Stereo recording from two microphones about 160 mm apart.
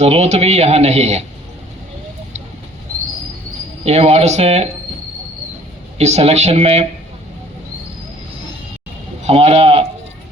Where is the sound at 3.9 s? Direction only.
40° right (ahead or behind).